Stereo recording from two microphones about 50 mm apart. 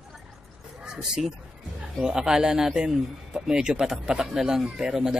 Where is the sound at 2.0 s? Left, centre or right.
Centre.